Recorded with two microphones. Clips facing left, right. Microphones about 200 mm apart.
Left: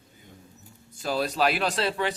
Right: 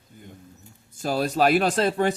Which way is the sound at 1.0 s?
45° right (ahead or behind).